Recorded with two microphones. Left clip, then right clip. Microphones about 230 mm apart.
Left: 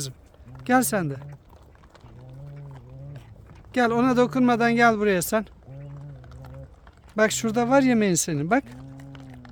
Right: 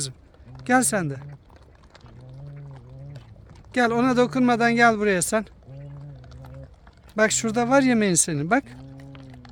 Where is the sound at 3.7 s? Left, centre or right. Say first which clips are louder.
Even; centre.